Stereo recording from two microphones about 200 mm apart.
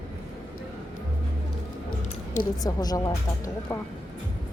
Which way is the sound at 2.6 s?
20° left (ahead or behind).